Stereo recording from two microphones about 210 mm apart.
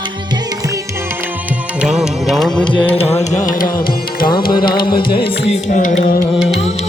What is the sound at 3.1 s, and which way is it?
Carnatic music, 35° left (ahead or behind).